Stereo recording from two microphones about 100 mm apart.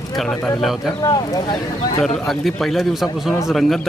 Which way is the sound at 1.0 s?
40° left (ahead or behind).